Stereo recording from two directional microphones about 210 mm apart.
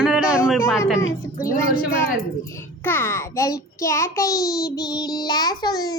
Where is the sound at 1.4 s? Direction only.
40° left (ahead or behind).